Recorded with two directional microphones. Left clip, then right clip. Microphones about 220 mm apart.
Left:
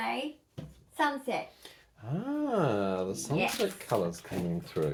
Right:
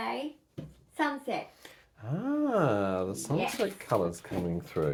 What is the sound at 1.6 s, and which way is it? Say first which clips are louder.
Speech: right 1 dB; 25° right (ahead or behind).